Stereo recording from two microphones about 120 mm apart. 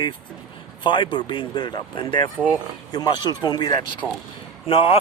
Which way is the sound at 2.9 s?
35° left (ahead or behind).